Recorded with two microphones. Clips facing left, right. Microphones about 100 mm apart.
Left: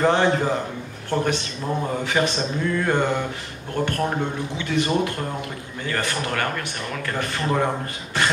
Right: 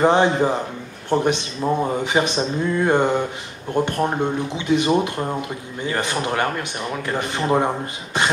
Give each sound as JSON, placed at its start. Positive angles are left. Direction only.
{"t": 0.0, "sound": "speech", "side_deg": -20}